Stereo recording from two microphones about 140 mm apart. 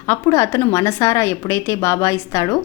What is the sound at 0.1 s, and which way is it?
A woman's voice, 20° left (ahead or behind).